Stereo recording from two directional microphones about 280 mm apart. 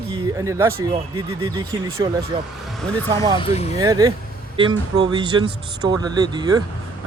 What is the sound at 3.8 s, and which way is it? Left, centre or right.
Speech, centre.